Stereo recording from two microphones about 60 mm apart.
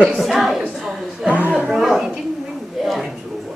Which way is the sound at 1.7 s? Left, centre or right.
Centre.